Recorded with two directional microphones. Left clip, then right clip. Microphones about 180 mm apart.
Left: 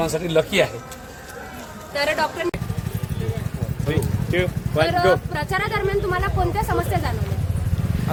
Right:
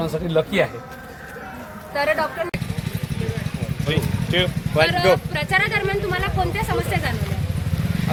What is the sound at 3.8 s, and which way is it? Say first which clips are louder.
Speech: right 1 dB; 5° left (ahead or behind).